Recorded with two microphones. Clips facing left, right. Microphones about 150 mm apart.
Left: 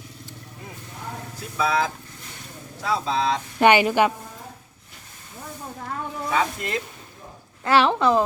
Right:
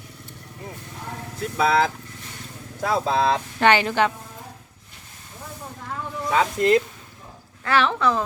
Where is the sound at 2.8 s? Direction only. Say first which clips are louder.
Right 3 dB; 50° right (ahead or behind).